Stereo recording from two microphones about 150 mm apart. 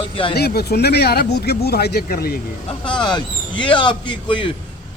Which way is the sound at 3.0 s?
30° left (ahead or behind).